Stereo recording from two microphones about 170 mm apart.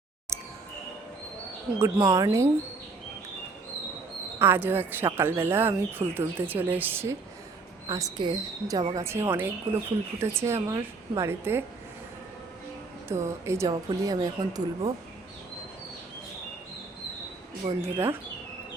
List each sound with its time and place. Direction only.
0.3 s music: 15° right (ahead or behind)
1.8 s a woman's voice: 20° right (ahead or behind)
4.4 s a woman's voice: 10° right (ahead or behind)
13.1 s a woman's voice: 15° right (ahead or behind)
17.8 s speech: 15° right (ahead or behind)